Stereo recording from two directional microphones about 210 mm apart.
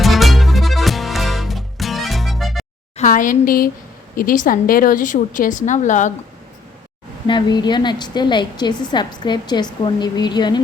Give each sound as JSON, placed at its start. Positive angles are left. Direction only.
{"t": 0.0, "sound": "music", "side_deg": 0}
{"t": 3.0, "sound": "a woman's voice", "side_deg": 40}
{"t": 7.3, "sound": "a woman's voice", "side_deg": 20}